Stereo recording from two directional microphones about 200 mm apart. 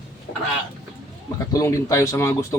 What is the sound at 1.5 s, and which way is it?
Speech, 15° left (ahead or behind).